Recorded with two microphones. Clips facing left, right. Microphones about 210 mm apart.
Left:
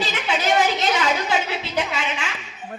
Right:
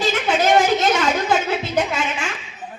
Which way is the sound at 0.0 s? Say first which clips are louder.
Right 5 dB; 50° right (ahead or behind).